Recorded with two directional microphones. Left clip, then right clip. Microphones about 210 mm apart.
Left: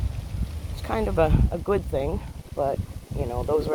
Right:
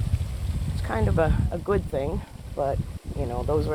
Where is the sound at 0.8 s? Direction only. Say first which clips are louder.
Left 2 dB; 15° left (ahead or behind).